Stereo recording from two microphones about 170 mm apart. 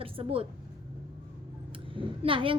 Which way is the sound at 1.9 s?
30° right (ahead or behind).